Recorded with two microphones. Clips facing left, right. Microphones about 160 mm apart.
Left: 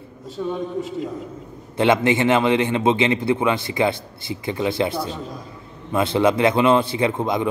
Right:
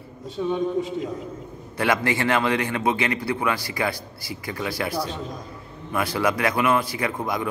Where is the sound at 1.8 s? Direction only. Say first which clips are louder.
Left 6 dB; 20° left (ahead or behind).